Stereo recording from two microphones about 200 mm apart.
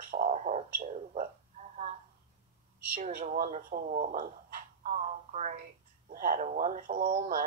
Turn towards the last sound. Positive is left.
turn(degrees=-40)  # may be behind; listen again after turning